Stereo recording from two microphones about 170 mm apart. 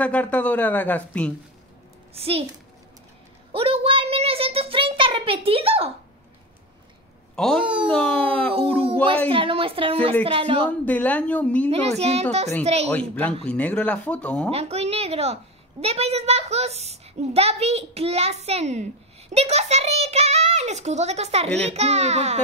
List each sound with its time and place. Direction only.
0.0 s speech: 10° left (ahead or behind)
2.1 s a child's voice: 35° right (ahead or behind)
3.5 s a child's voice: 35° right (ahead or behind)
7.3 s speech: 5° left (ahead or behind)
9.3 s a child's voice: 30° right (ahead or behind)
10.7 s speech: 10° left (ahead or behind)
11.7 s a child's voice: 40° right (ahead or behind)
12.9 s speech: 10° left (ahead or behind)
14.5 s a child's voice: 35° right (ahead or behind)